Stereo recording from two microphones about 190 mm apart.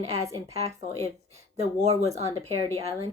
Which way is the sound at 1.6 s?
35° right (ahead or behind).